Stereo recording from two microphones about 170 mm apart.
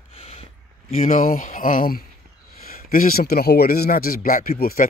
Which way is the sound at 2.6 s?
60° left (ahead or behind).